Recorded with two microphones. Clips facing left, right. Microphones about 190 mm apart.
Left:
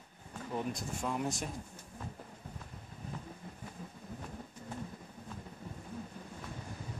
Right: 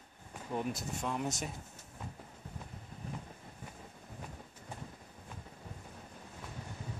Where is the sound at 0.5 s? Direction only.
5° right (ahead or behind).